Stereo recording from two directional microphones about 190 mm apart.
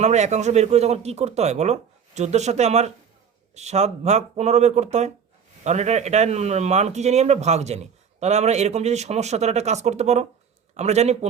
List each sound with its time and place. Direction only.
0.0 s speech: 35° right (ahead or behind)